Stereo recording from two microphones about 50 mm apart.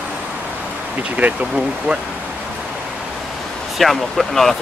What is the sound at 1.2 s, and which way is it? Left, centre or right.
Speech, right.